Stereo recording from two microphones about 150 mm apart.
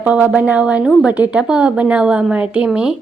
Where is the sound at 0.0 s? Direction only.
10° right (ahead or behind).